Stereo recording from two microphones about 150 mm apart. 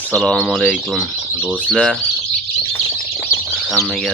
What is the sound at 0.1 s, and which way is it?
Speech, 5° left (ahead or behind).